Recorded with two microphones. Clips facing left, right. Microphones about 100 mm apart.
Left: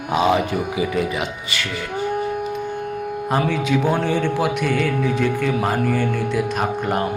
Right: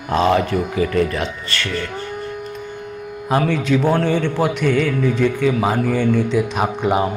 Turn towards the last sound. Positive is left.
turn(degrees=-5)  # may be behind; listen again after turning